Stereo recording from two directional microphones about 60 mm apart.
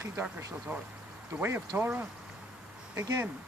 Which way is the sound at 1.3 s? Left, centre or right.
Right.